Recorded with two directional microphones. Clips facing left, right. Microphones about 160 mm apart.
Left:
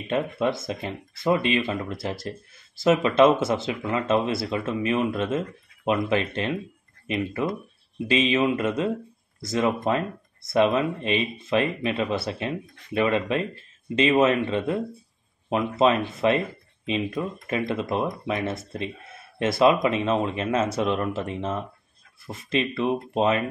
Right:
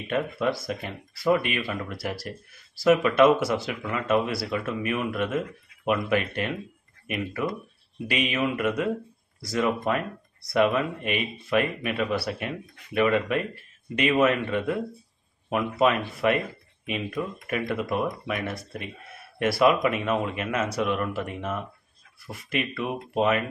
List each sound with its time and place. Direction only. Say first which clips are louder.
0.1 s speech: left 2 dB; 25° left (ahead or behind)